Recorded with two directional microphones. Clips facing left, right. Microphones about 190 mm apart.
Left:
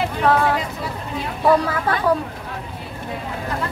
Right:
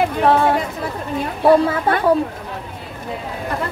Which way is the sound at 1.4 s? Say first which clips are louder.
Right 4 dB; 25° right (ahead or behind).